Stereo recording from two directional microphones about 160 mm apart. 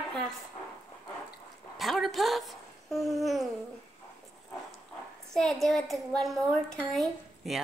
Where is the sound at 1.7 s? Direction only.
Centre (ahead or behind).